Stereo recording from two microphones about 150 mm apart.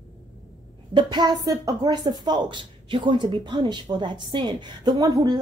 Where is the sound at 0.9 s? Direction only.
30° right (ahead or behind).